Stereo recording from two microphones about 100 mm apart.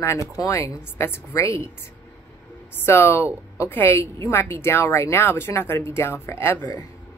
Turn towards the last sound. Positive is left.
turn(degrees=25)  # may be behind; listen again after turning